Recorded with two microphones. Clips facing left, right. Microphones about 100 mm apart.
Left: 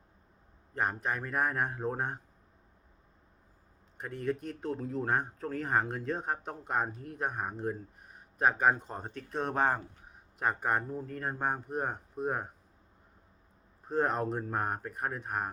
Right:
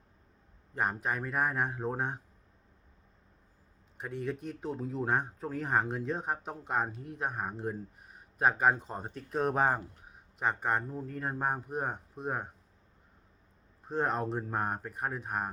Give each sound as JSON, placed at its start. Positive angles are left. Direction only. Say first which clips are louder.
{"t": 0.8, "sound": "speech", "louder": "even", "side_deg": -5}
{"t": 3.9, "sound": "speech", "louder": "left 2 dB", "side_deg": 0}
{"t": 13.8, "sound": "speech", "louder": "left 1 dB", "side_deg": 0}